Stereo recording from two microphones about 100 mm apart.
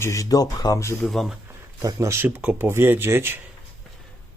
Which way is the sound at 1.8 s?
30° right (ahead or behind).